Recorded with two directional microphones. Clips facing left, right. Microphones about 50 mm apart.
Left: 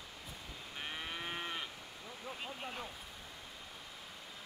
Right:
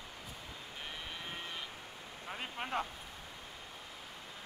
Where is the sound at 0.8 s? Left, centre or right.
Centre.